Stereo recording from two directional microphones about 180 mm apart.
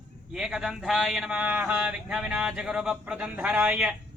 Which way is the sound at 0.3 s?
Centre (ahead or behind).